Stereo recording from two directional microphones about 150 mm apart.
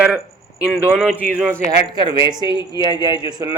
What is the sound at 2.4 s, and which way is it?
Speech, 30° left (ahead or behind).